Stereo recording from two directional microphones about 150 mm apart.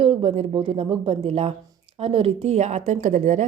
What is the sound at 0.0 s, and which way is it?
A woman's voice, 40° right (ahead or behind).